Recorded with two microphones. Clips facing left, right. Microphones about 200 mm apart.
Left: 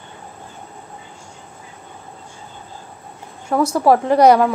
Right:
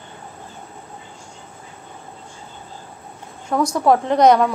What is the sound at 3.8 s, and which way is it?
Speech, 5° left (ahead or behind).